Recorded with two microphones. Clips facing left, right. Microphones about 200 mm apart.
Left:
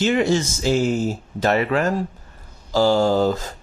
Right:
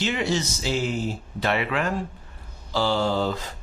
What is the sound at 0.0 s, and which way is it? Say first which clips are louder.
Speech: left 7 dB; 50° left (ahead or behind).